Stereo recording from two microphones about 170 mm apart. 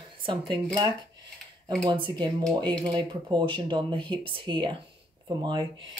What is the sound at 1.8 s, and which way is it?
Speech, 30° right (ahead or behind).